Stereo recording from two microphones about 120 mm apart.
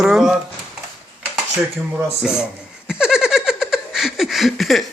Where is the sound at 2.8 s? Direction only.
5° right (ahead or behind).